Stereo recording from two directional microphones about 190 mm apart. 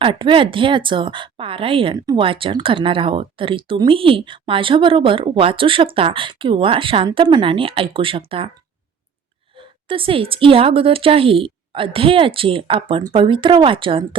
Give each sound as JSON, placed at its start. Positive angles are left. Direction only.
{"t": 0.0, "sound": "a woman's voice", "side_deg": -25}
{"t": 9.6, "sound": "a woman's voice", "side_deg": -25}